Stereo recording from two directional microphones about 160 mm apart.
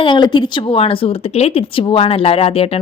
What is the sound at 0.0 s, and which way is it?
Speech, 30° left (ahead or behind).